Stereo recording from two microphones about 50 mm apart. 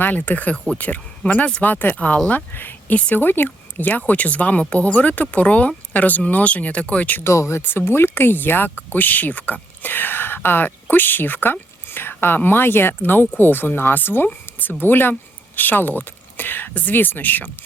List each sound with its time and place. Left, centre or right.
0.0 s speech: left
7.3 s speech: left
7.6 s speech: left